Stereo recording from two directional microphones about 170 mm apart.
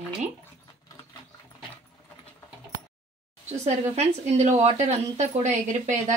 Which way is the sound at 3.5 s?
40° right (ahead or behind).